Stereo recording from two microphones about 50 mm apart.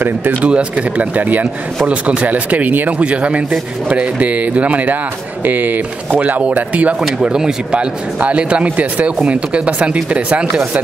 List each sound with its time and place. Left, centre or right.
0.0 s speech: right
0.5 s speech: right
3.0 s speech: right
7.0 s speech: centre
8.2 s speech: right